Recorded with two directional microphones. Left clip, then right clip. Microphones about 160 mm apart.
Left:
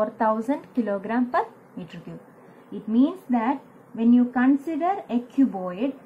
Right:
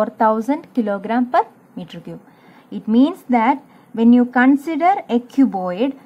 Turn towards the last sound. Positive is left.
turn(degrees=-35)  # may be behind; listen again after turning